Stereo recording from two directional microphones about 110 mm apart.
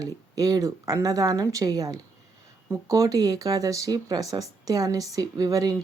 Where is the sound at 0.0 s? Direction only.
35° right (ahead or behind).